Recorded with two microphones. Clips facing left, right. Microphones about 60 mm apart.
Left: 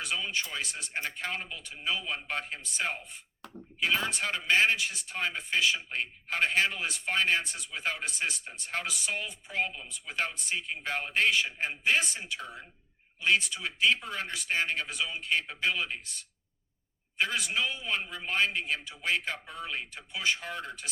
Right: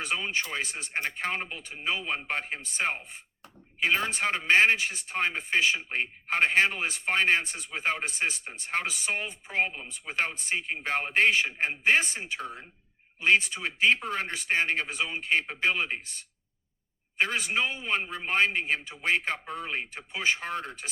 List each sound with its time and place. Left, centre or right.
0.0 s speech: right